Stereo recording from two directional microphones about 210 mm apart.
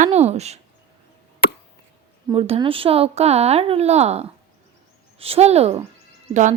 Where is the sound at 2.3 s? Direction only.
25° right (ahead or behind).